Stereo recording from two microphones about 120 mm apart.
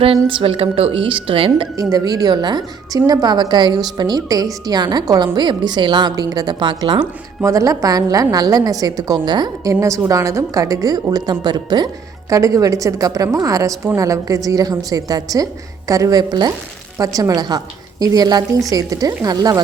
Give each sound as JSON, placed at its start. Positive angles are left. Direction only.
{"t": 0.0, "sound": "a woman's voice", "side_deg": -50}
{"t": 1.7, "sound": "a woman's voice", "side_deg": -30}
{"t": 7.4, "sound": "a woman's voice", "side_deg": -25}
{"t": 9.8, "sound": "a woman's voice", "side_deg": -25}